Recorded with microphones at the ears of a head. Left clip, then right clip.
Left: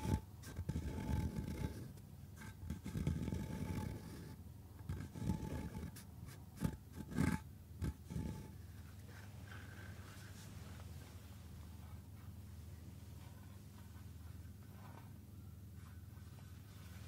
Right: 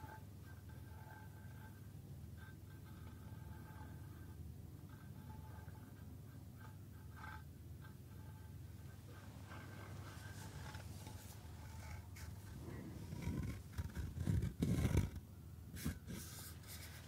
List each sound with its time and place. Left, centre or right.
0.7 s vehicle: left
2.7 s vehicle: left
6.6 s roar: left
12.7 s a sound: right